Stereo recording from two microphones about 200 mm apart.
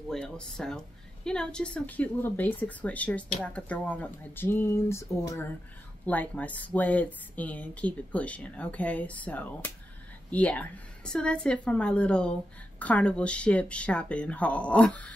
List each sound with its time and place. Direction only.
0.1 s a woman's voice: 5° left (ahead or behind)